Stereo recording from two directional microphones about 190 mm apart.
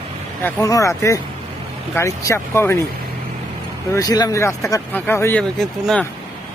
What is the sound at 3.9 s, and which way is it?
Speech, 20° left (ahead or behind).